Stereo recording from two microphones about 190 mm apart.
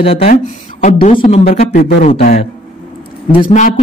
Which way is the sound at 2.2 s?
45° left (ahead or behind).